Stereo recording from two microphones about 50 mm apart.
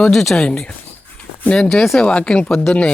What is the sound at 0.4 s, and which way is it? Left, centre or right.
Speech, left.